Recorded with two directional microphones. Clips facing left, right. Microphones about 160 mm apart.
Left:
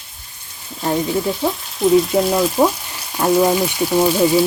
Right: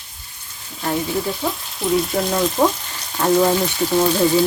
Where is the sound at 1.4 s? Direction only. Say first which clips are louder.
Left 6 dB; 5° left (ahead or behind).